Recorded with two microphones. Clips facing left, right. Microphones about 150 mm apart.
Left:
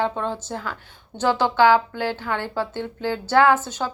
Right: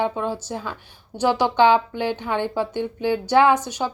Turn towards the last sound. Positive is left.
turn(degrees=-15)  # may be behind; listen again after turning